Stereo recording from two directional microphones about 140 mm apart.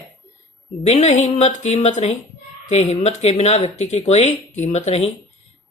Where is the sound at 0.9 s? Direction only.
50° left (ahead or behind).